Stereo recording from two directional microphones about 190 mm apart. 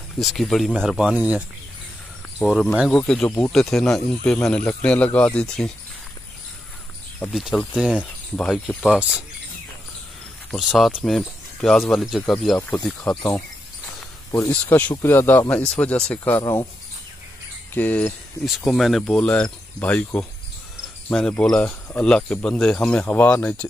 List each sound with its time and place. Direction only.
0.2 s speech: centre (ahead or behind)
2.4 s speech: centre (ahead or behind)
7.3 s speech: centre (ahead or behind)
10.5 s speech: centre (ahead or behind)
17.7 s speech: 10° left (ahead or behind)